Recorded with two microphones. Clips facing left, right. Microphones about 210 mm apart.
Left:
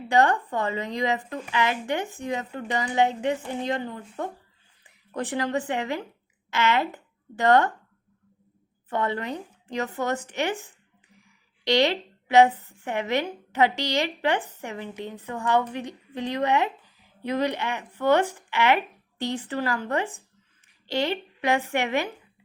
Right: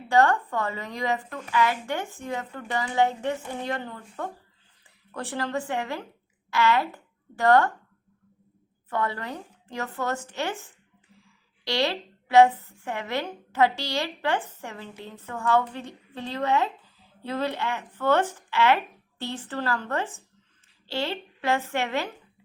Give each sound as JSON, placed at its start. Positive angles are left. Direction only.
{"t": 0.1, "sound": "a woman's voice", "side_deg": 20}
{"t": 8.9, "sound": "a woman's voice", "side_deg": 20}